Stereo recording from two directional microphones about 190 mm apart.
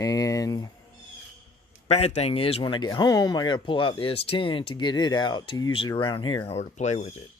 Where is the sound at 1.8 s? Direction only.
35° left (ahead or behind).